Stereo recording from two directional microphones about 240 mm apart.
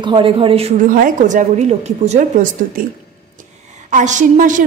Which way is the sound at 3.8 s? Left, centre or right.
Right.